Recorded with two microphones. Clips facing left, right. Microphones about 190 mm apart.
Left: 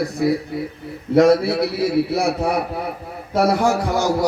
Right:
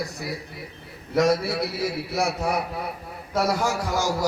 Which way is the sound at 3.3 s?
60° left (ahead or behind).